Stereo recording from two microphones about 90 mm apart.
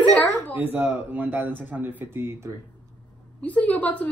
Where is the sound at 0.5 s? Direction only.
20° right (ahead or behind).